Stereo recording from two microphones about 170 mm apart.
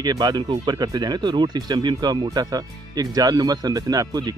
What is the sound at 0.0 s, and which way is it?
Speech, 25° right (ahead or behind).